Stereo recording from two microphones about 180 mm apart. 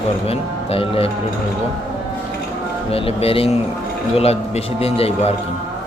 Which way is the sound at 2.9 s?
30° left (ahead or behind).